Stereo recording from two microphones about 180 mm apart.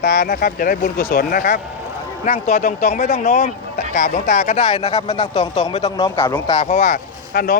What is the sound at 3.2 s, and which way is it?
Speech, 40° left (ahead or behind).